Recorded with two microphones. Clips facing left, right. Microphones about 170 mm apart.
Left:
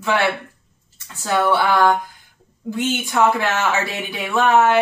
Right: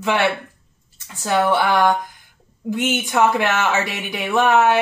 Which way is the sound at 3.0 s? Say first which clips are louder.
Even; 20° right (ahead or behind).